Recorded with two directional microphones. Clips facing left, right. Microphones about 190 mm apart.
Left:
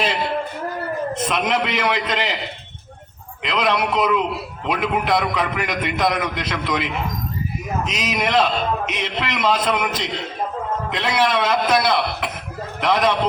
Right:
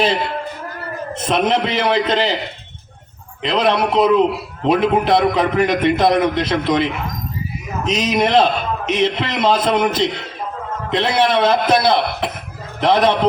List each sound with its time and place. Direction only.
1.3 s a man's voice: 30° right (ahead or behind)
3.4 s a man's voice: 30° right (ahead or behind)